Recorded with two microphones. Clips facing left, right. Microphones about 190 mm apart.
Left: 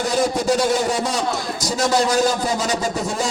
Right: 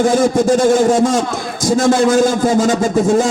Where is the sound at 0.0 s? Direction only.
50° right (ahead or behind).